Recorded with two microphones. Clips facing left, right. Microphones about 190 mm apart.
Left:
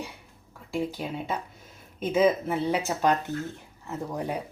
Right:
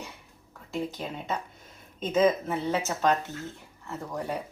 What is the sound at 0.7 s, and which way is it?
Speech, 10° left (ahead or behind).